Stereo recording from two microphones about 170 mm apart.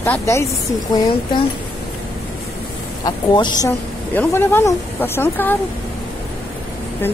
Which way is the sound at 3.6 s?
10° left (ahead or behind).